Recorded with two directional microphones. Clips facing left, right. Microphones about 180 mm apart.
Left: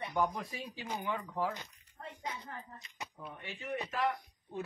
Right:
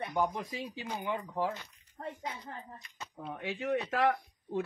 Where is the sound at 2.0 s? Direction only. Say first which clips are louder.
Right 3 dB; 40° right (ahead or behind).